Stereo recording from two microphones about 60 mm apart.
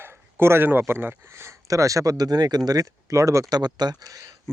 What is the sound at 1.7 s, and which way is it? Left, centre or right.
Speech, right.